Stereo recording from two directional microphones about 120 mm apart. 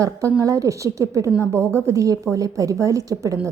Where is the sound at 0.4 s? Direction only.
30° right (ahead or behind).